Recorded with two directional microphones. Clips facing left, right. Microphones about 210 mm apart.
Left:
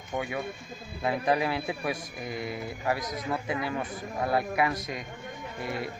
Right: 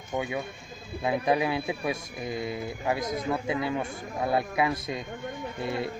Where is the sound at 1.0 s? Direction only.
20° right (ahead or behind).